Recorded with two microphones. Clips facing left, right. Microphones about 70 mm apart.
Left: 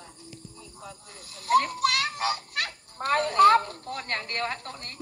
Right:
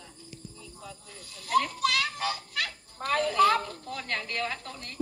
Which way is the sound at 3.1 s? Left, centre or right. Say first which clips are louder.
Left 4 dB; left.